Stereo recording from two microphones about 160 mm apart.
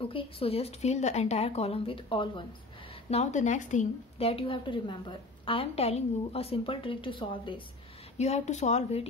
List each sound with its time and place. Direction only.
0.0 s a woman's voice: 35° left (ahead or behind)
3.1 s a woman's voice: 45° left (ahead or behind)
8.2 s speech: 45° left (ahead or behind)